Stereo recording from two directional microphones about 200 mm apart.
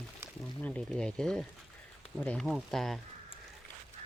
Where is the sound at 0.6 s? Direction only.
5° left (ahead or behind).